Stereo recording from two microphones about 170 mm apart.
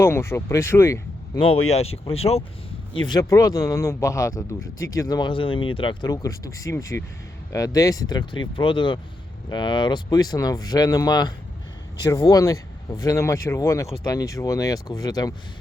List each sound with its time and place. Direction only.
0.0 s speech: 15° left (ahead or behind)
1.4 s speech: 35° left (ahead or behind)
3.1 s speech: 20° left (ahead or behind)